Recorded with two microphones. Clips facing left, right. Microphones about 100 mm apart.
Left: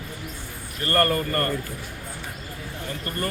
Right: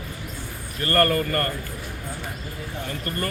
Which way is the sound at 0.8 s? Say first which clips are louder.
Right 1 dB; 20° left (ahead or behind).